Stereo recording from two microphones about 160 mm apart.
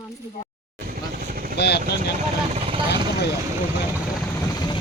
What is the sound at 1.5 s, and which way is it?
Speech, 90° left.